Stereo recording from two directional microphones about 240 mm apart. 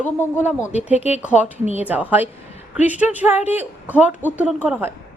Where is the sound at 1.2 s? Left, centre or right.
Centre.